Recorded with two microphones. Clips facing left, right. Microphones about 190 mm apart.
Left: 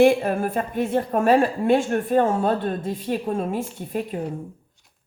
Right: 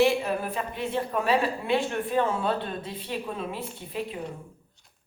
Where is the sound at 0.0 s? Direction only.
50° left (ahead or behind).